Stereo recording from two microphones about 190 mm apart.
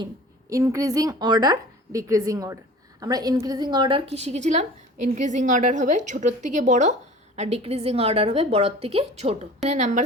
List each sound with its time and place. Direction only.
0.5 s a woman's voice: 15° right (ahead or behind); by 10.0 s 40° right (ahead or behind)